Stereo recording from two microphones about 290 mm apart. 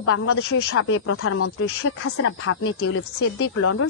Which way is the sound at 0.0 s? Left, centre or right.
Left.